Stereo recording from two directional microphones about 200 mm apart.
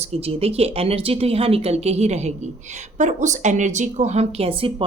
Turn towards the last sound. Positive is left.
turn(degrees=-25)  # may be behind; listen again after turning